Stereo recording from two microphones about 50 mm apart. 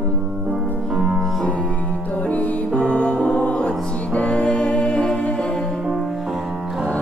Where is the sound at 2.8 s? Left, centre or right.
Left.